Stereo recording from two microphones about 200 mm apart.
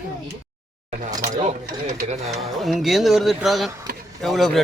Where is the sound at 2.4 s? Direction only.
Centre (ahead or behind).